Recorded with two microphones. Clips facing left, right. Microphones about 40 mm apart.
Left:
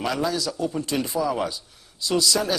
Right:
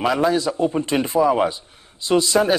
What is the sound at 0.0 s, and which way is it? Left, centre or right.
A man's voice, right.